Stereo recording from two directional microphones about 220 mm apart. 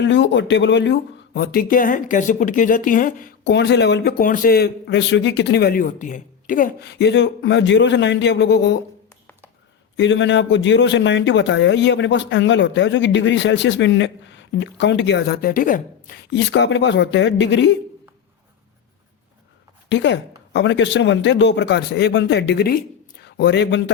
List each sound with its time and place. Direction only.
0.0 s speech: 55° left (ahead or behind)
10.0 s a man's voice: 55° left (ahead or behind)
19.9 s speech: 55° left (ahead or behind)